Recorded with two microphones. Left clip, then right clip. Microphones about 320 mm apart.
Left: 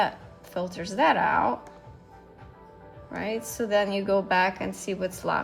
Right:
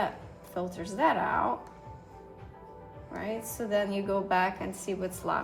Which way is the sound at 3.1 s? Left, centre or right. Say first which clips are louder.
Left 5 dB; left.